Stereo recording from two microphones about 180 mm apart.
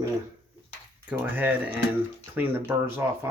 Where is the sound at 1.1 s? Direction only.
10° right (ahead or behind).